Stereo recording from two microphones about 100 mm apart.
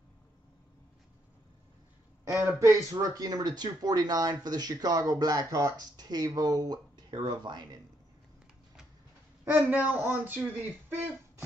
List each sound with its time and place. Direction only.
2.6 s speech: 35° right (ahead or behind)
9.7 s speech: 15° right (ahead or behind)